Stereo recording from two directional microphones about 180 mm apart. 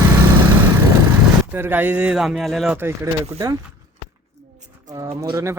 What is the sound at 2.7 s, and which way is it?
Speech, 15° right (ahead or behind).